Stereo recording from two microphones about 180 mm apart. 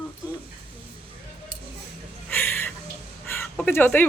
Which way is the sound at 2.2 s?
10° left (ahead or behind).